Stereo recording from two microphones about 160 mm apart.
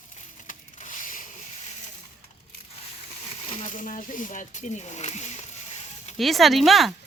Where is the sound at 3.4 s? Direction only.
45° left (ahead or behind).